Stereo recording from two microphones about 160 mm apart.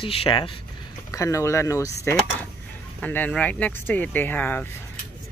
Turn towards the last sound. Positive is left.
turn(degrees=10)  # may be behind; listen again after turning